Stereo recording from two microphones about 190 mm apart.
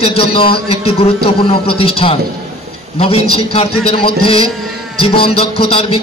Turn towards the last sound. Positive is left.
turn(degrees=30)  # may be behind; listen again after turning